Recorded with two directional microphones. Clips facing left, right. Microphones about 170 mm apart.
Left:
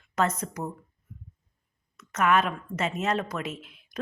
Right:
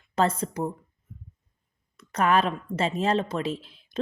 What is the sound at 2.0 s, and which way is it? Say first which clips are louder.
Speech: right 1 dB; 30° right (ahead or behind).